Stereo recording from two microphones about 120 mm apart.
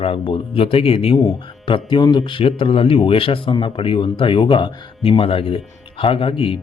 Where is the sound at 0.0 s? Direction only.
50° left (ahead or behind).